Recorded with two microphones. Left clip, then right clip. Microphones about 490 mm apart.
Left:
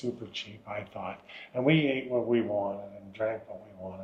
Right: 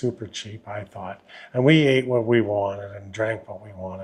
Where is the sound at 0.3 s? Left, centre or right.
Right.